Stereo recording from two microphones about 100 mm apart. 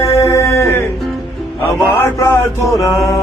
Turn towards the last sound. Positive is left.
turn(degrees=30)  # may be behind; listen again after turning